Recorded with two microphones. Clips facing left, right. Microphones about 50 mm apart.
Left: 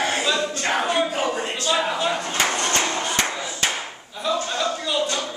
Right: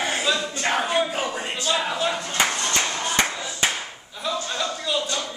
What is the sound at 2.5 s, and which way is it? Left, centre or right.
Music, left.